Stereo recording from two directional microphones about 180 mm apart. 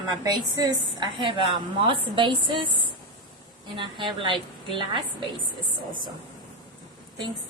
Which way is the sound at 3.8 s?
25° right (ahead or behind).